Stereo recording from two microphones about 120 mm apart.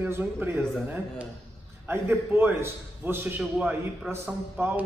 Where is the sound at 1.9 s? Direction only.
20° right (ahead or behind).